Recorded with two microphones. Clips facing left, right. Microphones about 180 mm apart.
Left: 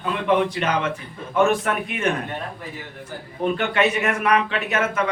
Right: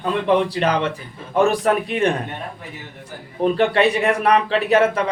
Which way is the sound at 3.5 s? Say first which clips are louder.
Right 4 dB; 35° right (ahead or behind).